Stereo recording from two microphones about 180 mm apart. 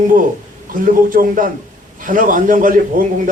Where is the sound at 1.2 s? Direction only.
55° right (ahead or behind).